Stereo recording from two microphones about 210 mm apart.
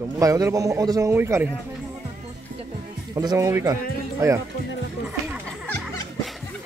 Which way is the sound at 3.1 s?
15° right (ahead or behind).